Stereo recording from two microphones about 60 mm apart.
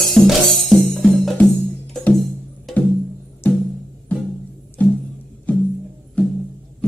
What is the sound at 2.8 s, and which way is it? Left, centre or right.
Music, left.